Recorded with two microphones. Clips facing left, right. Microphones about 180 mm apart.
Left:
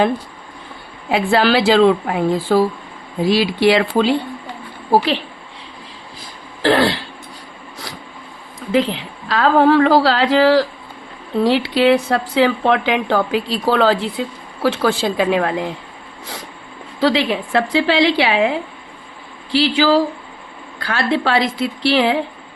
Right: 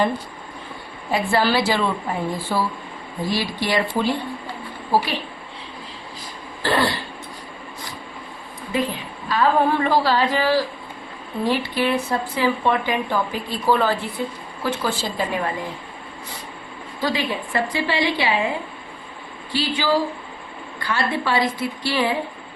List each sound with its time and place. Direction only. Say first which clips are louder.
1.1 s a woman's voice: left 5 dB; 80° left
3.2 s a woman's voice: left 10 dB; 85° left
6.6 s speech: left 6 dB; 85° left
8.7 s a woman's voice: left 7 dB; 90° left
17.0 s a woman's voice: left 7 dB; 90° left